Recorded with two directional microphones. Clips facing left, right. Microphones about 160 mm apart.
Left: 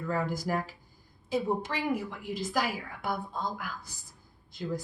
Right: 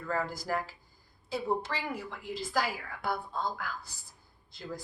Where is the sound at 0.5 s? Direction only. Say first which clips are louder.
Left 2 dB; 20° left (ahead or behind).